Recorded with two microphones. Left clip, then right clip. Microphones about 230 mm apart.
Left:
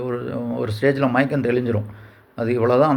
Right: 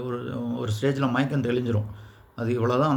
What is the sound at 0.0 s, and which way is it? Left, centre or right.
Speech, centre.